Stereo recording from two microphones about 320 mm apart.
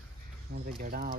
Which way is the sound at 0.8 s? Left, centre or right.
Right.